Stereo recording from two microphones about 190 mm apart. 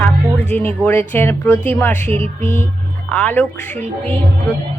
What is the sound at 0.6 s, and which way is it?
Music, 10° left (ahead or behind).